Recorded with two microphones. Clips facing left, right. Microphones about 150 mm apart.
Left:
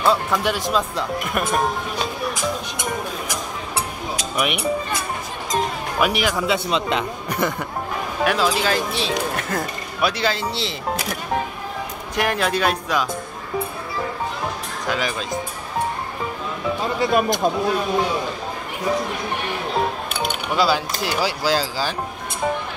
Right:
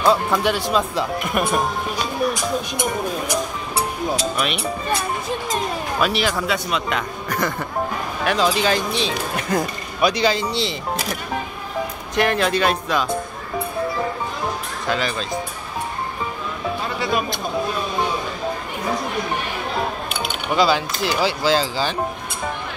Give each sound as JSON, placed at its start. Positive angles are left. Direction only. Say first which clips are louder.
{"t": 0.0, "sound": "speech", "louder": "right 2 dB", "side_deg": 0}
{"t": 4.4, "sound": "speech", "louder": "left 1 dB", "side_deg": 15}
{"t": 5.9, "sound": "speech", "louder": "left 1 dB", "side_deg": 15}
{"t": 6.4, "sound": "speech", "louder": "left 2 dB", "side_deg": 25}
{"t": 7.2, "sound": "speech", "louder": "right 2 dB", "side_deg": 10}
{"t": 12.2, "sound": "speech", "louder": "right 2 dB", "side_deg": 5}
{"t": 14.9, "sound": "speech", "louder": "right 1 dB", "side_deg": 10}
{"t": 17.0, "sound": "speech", "louder": "left 5 dB", "side_deg": 45}
{"t": 20.5, "sound": "speech", "louder": "right 2 dB", "side_deg": 5}